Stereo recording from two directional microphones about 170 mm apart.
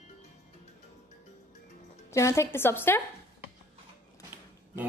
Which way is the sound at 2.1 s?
15° left (ahead or behind).